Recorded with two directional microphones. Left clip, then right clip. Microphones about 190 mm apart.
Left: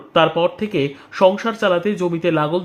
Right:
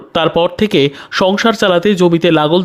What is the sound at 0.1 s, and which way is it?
Speech, 55° right (ahead or behind).